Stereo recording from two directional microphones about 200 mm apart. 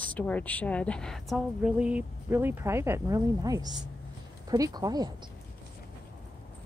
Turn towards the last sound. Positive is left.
turn(degrees=-20)  # may be behind; listen again after turning